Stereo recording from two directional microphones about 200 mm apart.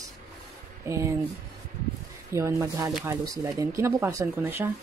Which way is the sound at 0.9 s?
15° right (ahead or behind).